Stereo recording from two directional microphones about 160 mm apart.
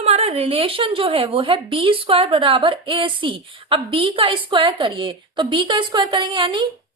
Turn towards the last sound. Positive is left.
turn(degrees=-30)  # may be behind; listen again after turning